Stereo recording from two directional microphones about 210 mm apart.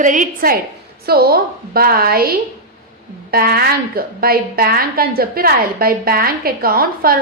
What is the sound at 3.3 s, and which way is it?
A woman's voice, 45° right (ahead or behind).